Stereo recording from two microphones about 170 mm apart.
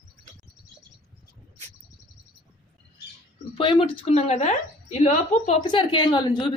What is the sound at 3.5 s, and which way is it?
A woman's voice, 30° left (ahead or behind).